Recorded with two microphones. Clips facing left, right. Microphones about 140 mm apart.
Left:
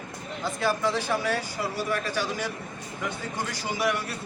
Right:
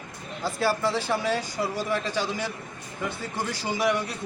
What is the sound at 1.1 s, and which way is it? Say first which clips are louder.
Speech: right 1 dB; 10° right (ahead or behind).